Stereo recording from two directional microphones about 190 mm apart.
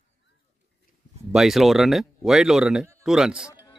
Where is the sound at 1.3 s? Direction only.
Centre (ahead or behind).